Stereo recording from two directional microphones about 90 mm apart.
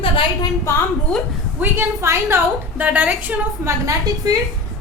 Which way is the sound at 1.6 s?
20° right (ahead or behind).